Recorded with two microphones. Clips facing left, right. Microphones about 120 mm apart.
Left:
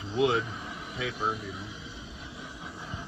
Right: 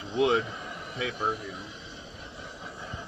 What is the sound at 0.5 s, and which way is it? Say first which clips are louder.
A man's voice: right 1 dB; centre (ahead or behind).